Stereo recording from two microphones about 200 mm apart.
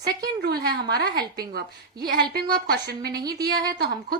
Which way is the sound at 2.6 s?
45° right (ahead or behind).